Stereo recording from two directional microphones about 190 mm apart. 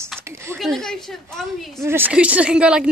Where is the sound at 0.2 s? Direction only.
15° right (ahead or behind).